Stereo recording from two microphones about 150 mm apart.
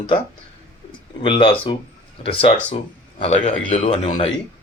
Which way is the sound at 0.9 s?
35° left (ahead or behind).